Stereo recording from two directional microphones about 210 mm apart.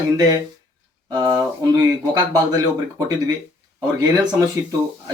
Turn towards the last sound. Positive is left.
turn(degrees=-20)  # may be behind; listen again after turning